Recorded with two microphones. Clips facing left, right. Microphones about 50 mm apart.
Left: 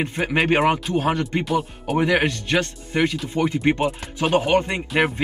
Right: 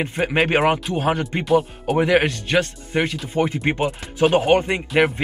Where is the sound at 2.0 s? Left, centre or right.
Right.